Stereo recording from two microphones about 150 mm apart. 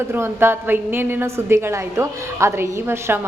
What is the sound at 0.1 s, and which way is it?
A woman's voice, 15° right (ahead or behind).